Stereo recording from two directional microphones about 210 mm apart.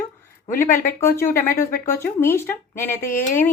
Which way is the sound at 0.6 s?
10° left (ahead or behind).